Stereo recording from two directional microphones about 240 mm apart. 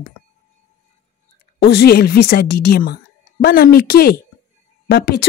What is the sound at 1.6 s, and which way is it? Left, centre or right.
Speech, left.